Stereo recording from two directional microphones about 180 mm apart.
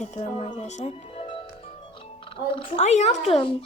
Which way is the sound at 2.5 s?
30° left (ahead or behind).